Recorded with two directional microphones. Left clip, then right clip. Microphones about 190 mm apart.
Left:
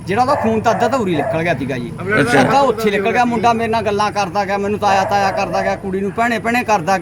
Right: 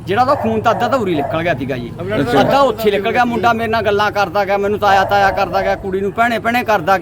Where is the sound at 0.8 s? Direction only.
20° right (ahead or behind).